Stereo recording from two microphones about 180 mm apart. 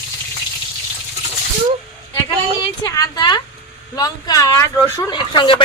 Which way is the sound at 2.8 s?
20° left (ahead or behind).